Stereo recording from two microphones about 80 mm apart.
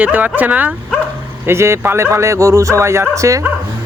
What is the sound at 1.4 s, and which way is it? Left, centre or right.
A man's voice, right.